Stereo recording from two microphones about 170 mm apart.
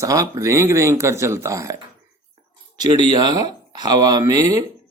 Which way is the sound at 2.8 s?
25° right (ahead or behind).